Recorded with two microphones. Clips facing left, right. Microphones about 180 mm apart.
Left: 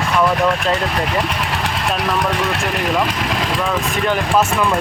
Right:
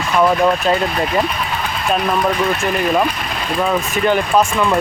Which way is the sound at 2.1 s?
90° left.